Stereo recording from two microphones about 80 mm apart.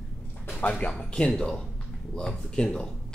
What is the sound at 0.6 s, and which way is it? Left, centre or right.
Speech, centre.